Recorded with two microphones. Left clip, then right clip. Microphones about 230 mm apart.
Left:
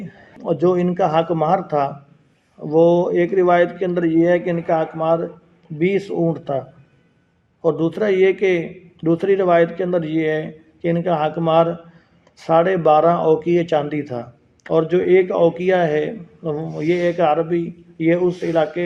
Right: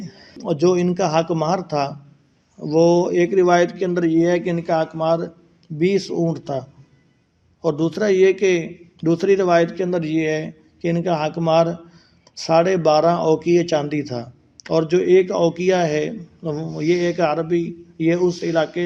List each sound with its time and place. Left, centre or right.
0.1 s a man's voice: right